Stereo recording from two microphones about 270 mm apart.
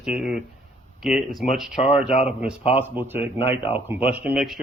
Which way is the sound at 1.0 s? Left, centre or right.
Centre.